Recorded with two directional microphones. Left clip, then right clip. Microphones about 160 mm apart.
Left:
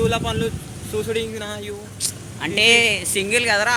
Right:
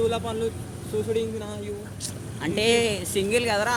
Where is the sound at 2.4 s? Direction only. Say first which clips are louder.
Left 7 dB; 20° right (ahead or behind).